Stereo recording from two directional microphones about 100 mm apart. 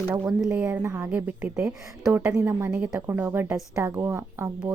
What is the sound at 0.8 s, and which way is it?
A woman's voice, 25° right (ahead or behind).